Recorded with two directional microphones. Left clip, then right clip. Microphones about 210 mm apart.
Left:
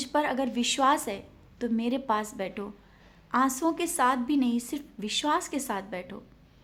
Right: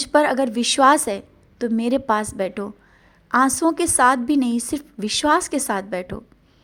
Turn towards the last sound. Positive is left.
turn(degrees=-30)  # may be behind; listen again after turning